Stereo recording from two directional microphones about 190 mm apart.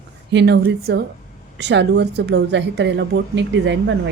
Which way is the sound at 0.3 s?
65° right (ahead or behind).